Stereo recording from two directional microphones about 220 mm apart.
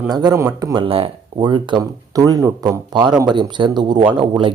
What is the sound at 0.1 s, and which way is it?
Speech, 15° right (ahead or behind).